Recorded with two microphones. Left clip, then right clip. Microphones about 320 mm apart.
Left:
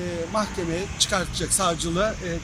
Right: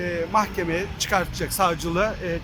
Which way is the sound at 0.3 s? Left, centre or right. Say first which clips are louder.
Right 4 dB; centre.